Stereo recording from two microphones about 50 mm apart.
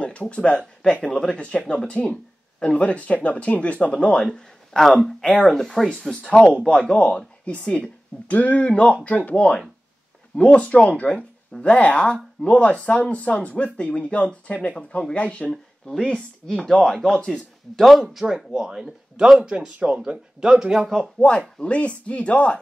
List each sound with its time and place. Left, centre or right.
0.0 s speech: left; by 6.3 s centre
6.9 s speech: left
8.3 s speech: left
15.5 s speech: centre
18.2 s speech: centre
21.2 s speech: left